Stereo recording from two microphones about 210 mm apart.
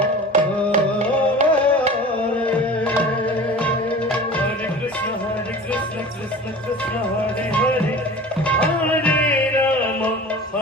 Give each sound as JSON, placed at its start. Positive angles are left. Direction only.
{"t": 0.3, "sound": "music", "side_deg": -35}
{"t": 8.4, "sound": "music", "side_deg": 5}